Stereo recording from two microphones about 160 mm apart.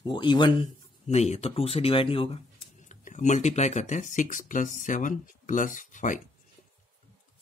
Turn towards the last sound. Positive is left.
turn(degrees=55)  # may be behind; listen again after turning